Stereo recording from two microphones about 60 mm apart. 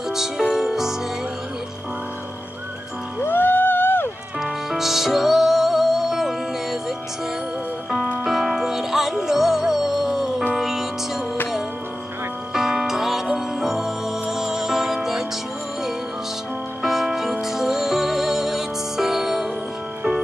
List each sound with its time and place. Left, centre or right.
0.1 s music: centre
3.2 s a sound: left
4.4 s music: centre
8.2 s music: centre
12.5 s music: centre
16.8 s music: centre